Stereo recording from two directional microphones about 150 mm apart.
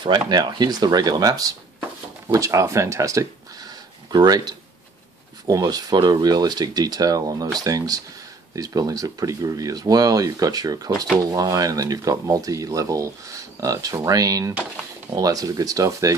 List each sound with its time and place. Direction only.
0.0 s speech: 30° right (ahead or behind)